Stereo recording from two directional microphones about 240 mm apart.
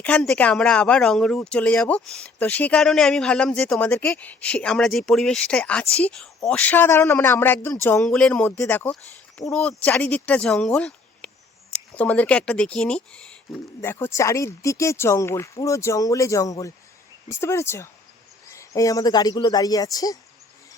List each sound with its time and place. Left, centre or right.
0.0 s a woman's voice: centre